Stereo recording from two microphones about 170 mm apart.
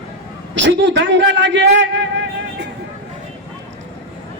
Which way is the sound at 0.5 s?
90° right.